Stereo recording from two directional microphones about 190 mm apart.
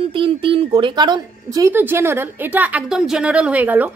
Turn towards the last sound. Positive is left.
turn(degrees=-10)  # may be behind; listen again after turning